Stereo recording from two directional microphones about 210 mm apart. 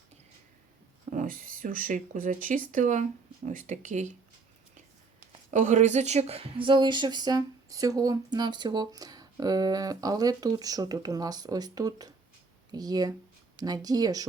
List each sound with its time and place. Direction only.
1.1 s speech: 40° right (ahead or behind)
5.5 s speech: 35° right (ahead or behind); by 14.3 s 15° right (ahead or behind)